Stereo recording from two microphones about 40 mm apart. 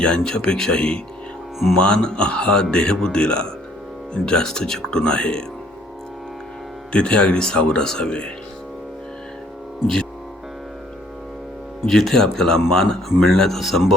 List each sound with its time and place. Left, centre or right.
0.0 s speech: left
6.9 s speech: left
11.9 s speech: centre
13.6 s speech: centre